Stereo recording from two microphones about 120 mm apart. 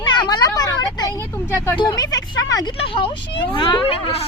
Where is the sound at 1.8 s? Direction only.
35° left (ahead or behind).